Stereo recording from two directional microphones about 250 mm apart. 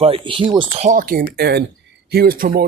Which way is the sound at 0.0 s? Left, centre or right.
Right.